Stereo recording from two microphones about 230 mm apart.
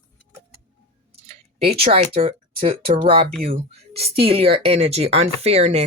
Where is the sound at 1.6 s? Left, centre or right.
Right.